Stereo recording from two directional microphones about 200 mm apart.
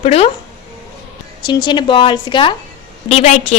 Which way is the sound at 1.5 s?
20° left (ahead or behind).